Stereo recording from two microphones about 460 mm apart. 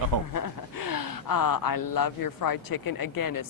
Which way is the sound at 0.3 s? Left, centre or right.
Left.